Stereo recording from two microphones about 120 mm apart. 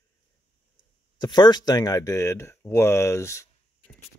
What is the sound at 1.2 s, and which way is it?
Speech, 35° left (ahead or behind).